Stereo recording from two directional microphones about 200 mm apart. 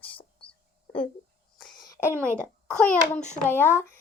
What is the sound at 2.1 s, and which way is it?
Speech, 10° right (ahead or behind).